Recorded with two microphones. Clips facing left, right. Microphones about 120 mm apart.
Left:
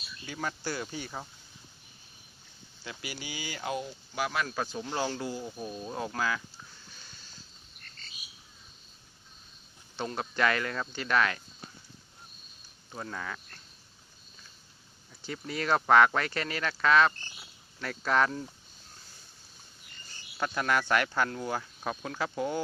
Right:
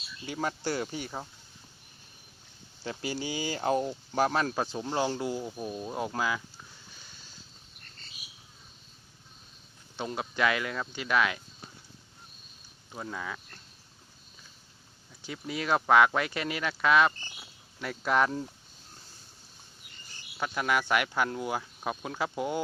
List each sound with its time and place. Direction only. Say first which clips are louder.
0.3 s speech: right 4 dB; 30° right (ahead or behind)
2.8 s speech: right 7 dB; 35° right (ahead or behind)
4.5 s speech: right 3 dB; 25° right (ahead or behind)
5.5 s speech: right 2 dB; 10° right (ahead or behind)
10.0 s speech: even; 10° right (ahead or behind)
12.9 s speech: right 1 dB; 5° right (ahead or behind)
15.2 s speech: even; 5° right (ahead or behind)
20.4 s speech: even; 5° right (ahead or behind)